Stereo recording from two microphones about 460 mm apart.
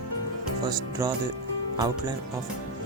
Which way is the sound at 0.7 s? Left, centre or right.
Centre.